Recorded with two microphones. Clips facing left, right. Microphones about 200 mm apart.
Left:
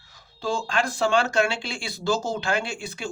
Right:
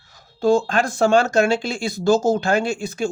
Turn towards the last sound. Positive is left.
turn(degrees=-45)  # may be behind; listen again after turning